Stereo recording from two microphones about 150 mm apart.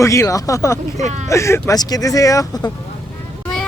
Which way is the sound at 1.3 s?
20° left (ahead or behind).